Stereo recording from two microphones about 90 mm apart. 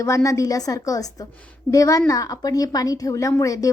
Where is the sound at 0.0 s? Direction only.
35° left (ahead or behind).